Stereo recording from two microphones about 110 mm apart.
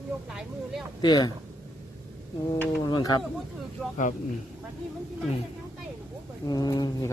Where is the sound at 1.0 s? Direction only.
40° left (ahead or behind).